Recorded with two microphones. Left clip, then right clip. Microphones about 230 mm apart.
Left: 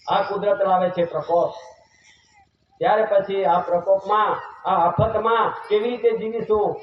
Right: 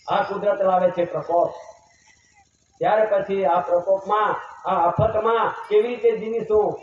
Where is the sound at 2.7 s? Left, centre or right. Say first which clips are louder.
Left 1 dB; left.